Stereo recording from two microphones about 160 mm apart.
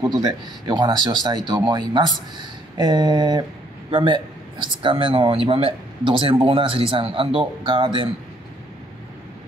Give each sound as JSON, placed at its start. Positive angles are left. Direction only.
{"t": 0.0, "sound": "speech", "side_deg": -25}